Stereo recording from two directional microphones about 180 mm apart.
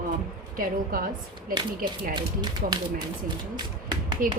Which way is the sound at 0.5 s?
50° right (ahead or behind).